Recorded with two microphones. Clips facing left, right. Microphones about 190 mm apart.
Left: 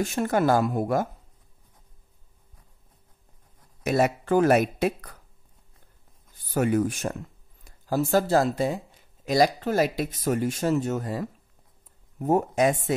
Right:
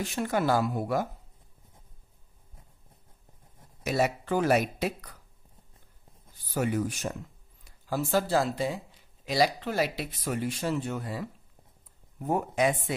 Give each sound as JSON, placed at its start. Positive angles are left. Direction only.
{"t": 0.0, "sound": "speech", "side_deg": 45}
{"t": 3.8, "sound": "speech", "side_deg": 50}
{"t": 6.5, "sound": "speech", "side_deg": 50}